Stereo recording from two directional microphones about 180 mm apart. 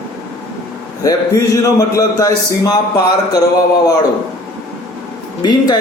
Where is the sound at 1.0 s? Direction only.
20° left (ahead or behind).